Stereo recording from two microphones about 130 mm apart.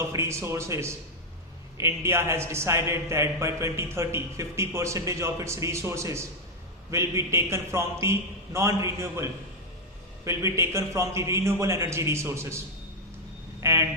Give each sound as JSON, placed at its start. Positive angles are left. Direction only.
{"t": 0.0, "sound": "a man's voice", "side_deg": -20}
{"t": 13.6, "sound": "speech", "side_deg": -20}